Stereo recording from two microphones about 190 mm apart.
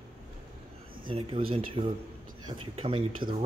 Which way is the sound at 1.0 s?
25° right (ahead or behind).